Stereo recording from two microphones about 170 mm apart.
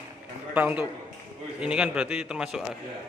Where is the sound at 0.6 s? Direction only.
10° right (ahead or behind).